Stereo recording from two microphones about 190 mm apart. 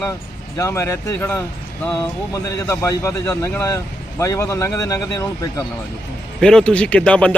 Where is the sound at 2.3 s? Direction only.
15° left (ahead or behind).